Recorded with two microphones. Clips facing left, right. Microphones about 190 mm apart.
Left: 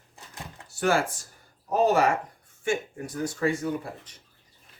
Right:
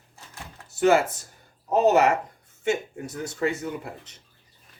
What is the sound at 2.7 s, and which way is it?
Speech, 25° right (ahead or behind).